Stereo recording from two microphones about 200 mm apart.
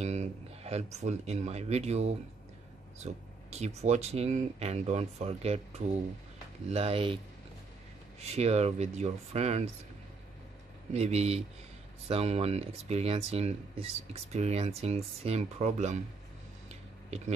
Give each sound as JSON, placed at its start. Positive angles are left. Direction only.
{"t": 0.0, "sound": "speech", "side_deg": -35}
{"t": 8.2, "sound": "speech", "side_deg": -30}
{"t": 10.9, "sound": "speech", "side_deg": -35}